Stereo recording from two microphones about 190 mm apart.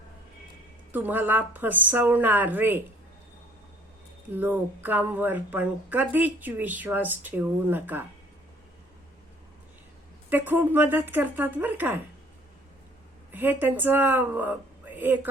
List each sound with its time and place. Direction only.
0.9 s speech: 10° right (ahead or behind)
4.4 s speech: 10° right (ahead or behind)
10.2 s speech: 10° right (ahead or behind)
13.3 s a man's voice: 10° right (ahead or behind)